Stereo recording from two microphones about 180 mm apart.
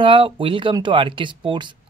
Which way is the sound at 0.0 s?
30° right (ahead or behind).